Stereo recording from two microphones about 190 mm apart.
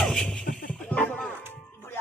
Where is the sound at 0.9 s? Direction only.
10° left (ahead or behind).